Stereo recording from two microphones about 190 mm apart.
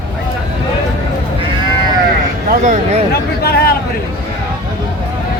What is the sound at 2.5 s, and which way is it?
Speech, 40° right (ahead or behind).